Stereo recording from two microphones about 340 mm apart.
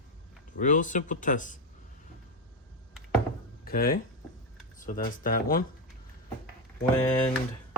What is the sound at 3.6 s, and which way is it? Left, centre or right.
Speech, left.